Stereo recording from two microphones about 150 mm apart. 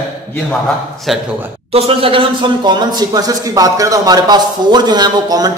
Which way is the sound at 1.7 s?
40° right (ahead or behind).